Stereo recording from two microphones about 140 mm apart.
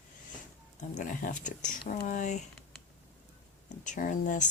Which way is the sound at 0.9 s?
70° left (ahead or behind).